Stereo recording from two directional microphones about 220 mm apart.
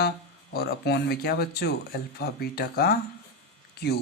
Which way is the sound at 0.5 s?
45° left (ahead or behind).